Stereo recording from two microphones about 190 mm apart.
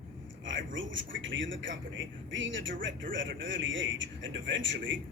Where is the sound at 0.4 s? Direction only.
80° right.